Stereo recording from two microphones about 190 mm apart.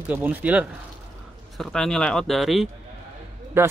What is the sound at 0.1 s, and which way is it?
Speech, 10° right (ahead or behind).